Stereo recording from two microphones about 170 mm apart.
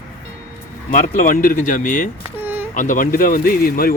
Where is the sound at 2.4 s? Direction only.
10° right (ahead or behind).